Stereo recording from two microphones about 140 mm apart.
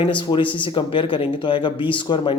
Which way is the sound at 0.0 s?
35° left (ahead or behind).